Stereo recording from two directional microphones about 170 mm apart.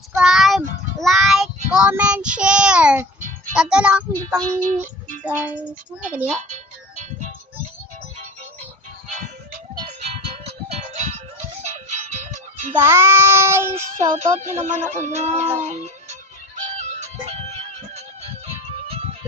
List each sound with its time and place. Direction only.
0.1 s child singing: 5° right (ahead or behind)
3.2 s music: 50° right (ahead or behind)
3.5 s a child's voice: 5° right (ahead or behind)
5.2 s child singing: 10° right (ahead or behind)
6.5 s music: 45° right (ahead or behind)
10.0 s music: 35° right (ahead or behind)
12.8 s child singing: 15° right (ahead or behind)
13.7 s music: 40° right (ahead or behind)